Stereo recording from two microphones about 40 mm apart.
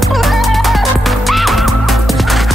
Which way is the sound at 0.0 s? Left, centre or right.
Centre.